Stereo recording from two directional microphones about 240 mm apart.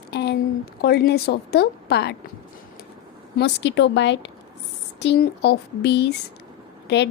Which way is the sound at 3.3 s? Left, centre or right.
Left.